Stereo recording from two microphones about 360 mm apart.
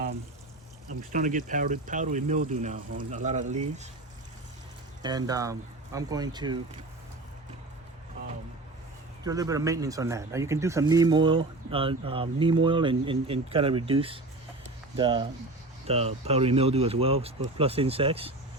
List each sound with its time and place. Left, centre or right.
1.1 s speech: right
5.0 s speech: centre
9.2 s speech: centre